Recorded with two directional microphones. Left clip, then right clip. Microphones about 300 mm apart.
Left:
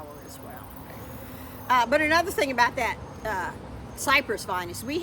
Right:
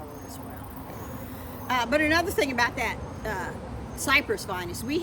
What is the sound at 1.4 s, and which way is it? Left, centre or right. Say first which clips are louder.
Speech: left 5 dB; centre.